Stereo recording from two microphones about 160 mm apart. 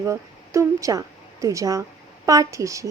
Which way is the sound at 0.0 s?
15° right (ahead or behind).